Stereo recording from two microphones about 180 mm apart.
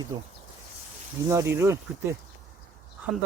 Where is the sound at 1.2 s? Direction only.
15° right (ahead or behind).